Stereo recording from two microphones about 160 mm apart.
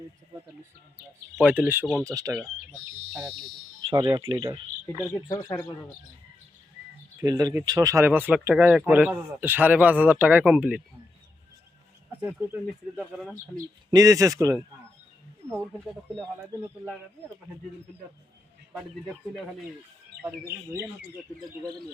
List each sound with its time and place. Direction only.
1.4 s speech: 10° right (ahead or behind)
3.8 s speech: 25° right (ahead or behind)
5.5 s speech: 15° left (ahead or behind)
7.2 s speech: 25° right (ahead or behind); by 10.8 s 5° right (ahead or behind)
12.2 s speech: 10° right (ahead or behind)
13.9 s speech: 20° right (ahead or behind)
18.7 s speech: centre (ahead or behind)